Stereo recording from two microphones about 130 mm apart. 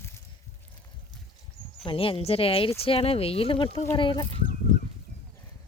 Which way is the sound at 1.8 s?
45° left (ahead or behind).